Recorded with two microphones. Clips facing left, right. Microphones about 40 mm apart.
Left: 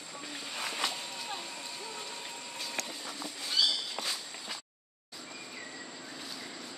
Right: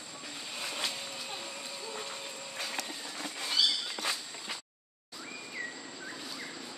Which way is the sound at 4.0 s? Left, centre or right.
Left.